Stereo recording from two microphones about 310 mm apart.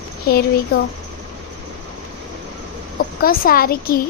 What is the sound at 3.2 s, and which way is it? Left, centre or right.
Speech, left.